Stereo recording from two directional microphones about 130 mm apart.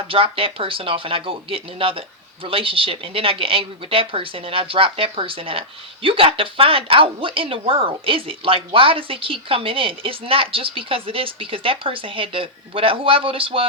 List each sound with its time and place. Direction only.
0.1 s speech: 45° right (ahead or behind)